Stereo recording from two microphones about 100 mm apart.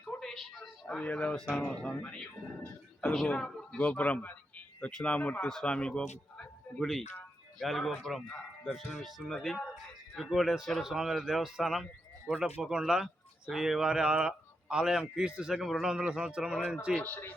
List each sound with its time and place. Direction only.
0.0 s a sound: 10° left (ahead or behind)
1.7 s a woman's voice: 10° left (ahead or behind); by 15.5 s 10° right (ahead or behind)
15.5 s a man's voice: centre (ahead or behind)
16.9 s speech: 15° left (ahead or behind)